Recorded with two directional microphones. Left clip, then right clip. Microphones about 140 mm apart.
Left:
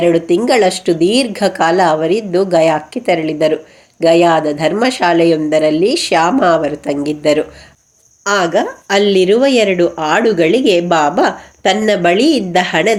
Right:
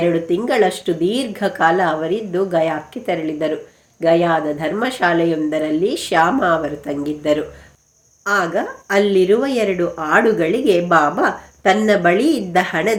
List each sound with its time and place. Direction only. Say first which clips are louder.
0.0 s a woman's voice: left 6 dB; 35° left (ahead or behind)